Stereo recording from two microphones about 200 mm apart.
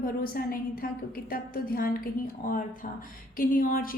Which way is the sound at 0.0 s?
50° left (ahead or behind).